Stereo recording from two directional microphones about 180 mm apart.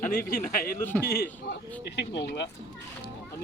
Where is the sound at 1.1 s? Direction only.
60° left (ahead or behind).